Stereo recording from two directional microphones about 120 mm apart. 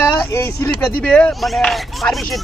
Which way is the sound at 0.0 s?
20° left (ahead or behind).